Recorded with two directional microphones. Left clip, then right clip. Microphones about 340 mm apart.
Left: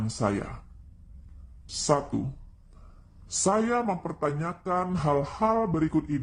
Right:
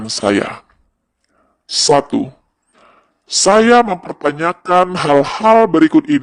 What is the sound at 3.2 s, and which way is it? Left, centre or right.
A man's voice, right.